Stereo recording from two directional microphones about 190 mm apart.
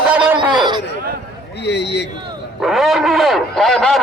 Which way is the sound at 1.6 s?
65° left (ahead or behind).